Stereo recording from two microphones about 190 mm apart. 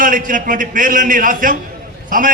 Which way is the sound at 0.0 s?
45° right (ahead or behind).